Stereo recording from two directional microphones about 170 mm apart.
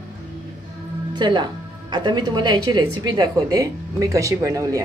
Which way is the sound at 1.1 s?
25° right (ahead or behind).